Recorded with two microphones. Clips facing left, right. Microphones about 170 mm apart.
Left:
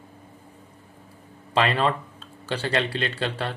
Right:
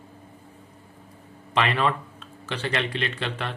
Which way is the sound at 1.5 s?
30° left (ahead or behind).